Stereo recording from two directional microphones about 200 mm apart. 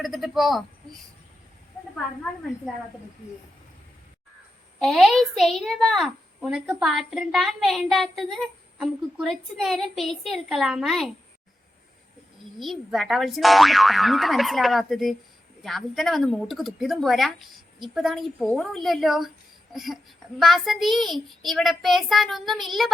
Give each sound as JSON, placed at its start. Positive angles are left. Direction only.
{"t": 0.0, "sound": "a child's voice", "side_deg": 0}
{"t": 4.8, "sound": "a child's voice", "side_deg": 0}
{"t": 12.5, "sound": "a child's voice", "side_deg": 0}